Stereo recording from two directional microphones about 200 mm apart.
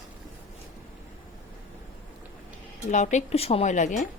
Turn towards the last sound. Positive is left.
turn(degrees=40)  # may be behind; listen again after turning